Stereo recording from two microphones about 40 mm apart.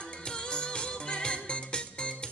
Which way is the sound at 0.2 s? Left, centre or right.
Left.